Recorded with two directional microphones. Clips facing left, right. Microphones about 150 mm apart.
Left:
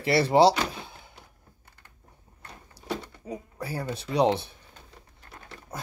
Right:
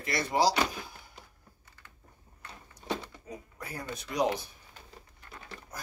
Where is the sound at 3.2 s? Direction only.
30° left (ahead or behind).